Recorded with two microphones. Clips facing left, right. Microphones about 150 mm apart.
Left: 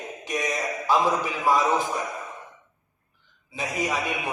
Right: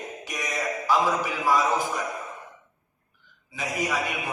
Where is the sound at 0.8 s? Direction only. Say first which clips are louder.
Left 1 dB; 20° left (ahead or behind).